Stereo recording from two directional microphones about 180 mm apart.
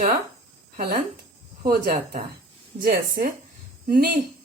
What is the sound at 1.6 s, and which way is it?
A woman's voice, 50° right (ahead or behind).